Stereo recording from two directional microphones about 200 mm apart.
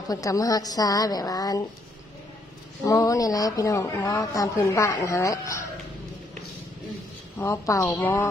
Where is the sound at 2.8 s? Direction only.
15° left (ahead or behind).